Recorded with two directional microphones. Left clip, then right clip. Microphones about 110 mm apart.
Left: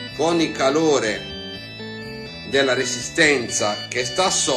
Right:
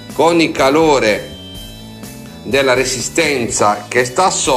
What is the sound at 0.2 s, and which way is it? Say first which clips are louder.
Speech: right 8 dB; 15° right (ahead or behind).